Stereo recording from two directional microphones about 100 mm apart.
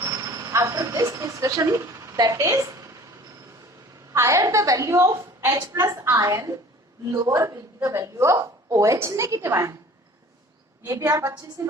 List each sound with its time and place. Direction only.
0.0 s a sound: 35° right (ahead or behind)
4.1 s a woman's voice: 30° right (ahead or behind)
10.8 s a woman's voice: 35° right (ahead or behind)